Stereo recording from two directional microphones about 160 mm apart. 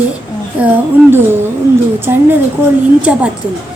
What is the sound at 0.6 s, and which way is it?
Speech, 15° right (ahead or behind).